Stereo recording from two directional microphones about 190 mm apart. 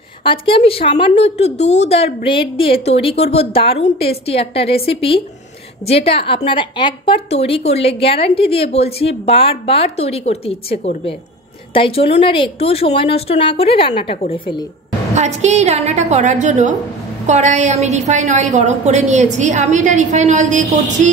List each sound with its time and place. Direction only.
0.2 s a woman's voice: 25° left (ahead or behind)
15.1 s a woman's voice: 35° right (ahead or behind)